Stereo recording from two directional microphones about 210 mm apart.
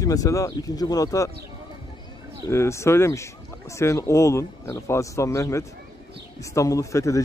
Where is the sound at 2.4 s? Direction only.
15° left (ahead or behind).